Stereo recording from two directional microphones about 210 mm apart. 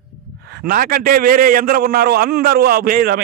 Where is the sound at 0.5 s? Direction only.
45° right (ahead or behind).